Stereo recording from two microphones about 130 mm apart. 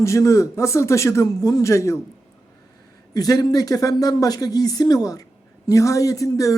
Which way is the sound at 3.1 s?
30° left (ahead or behind).